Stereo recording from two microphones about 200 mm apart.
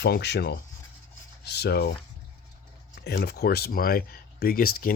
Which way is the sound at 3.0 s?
55° left (ahead or behind).